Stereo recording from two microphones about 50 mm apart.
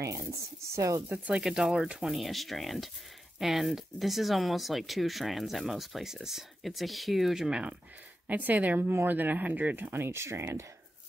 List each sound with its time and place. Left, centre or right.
0.0 s speech: right
1.3 s speech: centre
2.0 s speech: centre
7.4 s speech: centre
8.3 s speech: right
8.8 s speech: right
9.1 s speech: right
9.9 s speech: right